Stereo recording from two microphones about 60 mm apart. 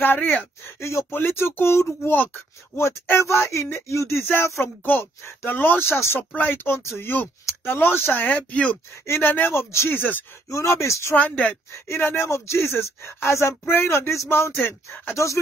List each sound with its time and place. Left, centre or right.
0.0 s speech: left
0.7 s speech: left
4.2 s speech: left
6.3 s speech: left
6.8 s speech: left
7.6 s speech: left
9.0 s speech: left
9.8 s speech: left
10.5 s speech: left
11.1 s speech: left
11.7 s speech: left
13.7 s speech: left